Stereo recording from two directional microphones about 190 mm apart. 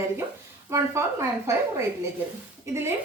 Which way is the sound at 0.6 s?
15° right (ahead or behind).